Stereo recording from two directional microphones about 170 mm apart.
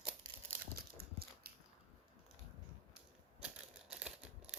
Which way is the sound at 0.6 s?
65° right (ahead or behind).